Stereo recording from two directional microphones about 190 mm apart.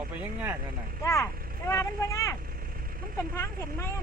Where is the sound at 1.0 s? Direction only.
15° left (ahead or behind).